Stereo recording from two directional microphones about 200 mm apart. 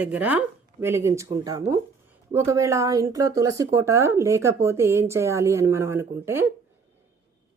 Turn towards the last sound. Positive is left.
turn(degrees=-10)  # may be behind; listen again after turning